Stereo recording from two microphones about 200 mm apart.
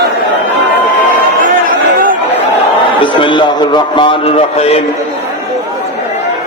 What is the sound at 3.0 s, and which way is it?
A man's voice, 25° left (ahead or behind).